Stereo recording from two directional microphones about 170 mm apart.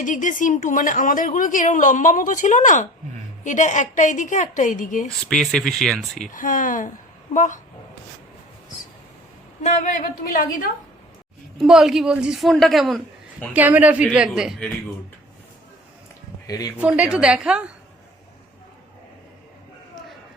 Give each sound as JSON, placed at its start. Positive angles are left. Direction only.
{"t": 0.0, "sound": "speech", "side_deg": 50}
{"t": 5.3, "sound": "a woman's voice", "side_deg": 0}
{"t": 6.3, "sound": "speech", "side_deg": 50}
{"t": 11.5, "sound": "a woman's voice", "side_deg": -5}
{"t": 16.5, "sound": "speech", "side_deg": 20}
{"t": 16.7, "sound": "a woman's voice", "side_deg": -5}